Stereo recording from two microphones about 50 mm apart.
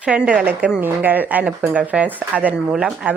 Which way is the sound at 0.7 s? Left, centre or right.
Right.